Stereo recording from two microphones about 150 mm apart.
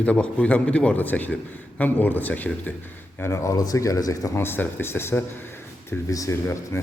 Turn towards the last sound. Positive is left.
turn(degrees=20)  # may be behind; listen again after turning